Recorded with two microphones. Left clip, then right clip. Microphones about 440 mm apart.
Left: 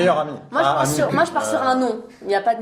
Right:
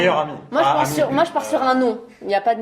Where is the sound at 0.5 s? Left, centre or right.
Right.